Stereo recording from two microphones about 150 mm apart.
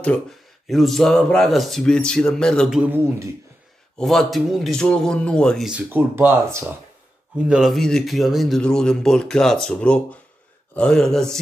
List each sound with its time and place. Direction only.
0.7 s speech: centre (ahead or behind)
2.8 s speech: 15° right (ahead or behind)
4.0 s speech: centre (ahead or behind)
5.7 s speech: 10° right (ahead or behind)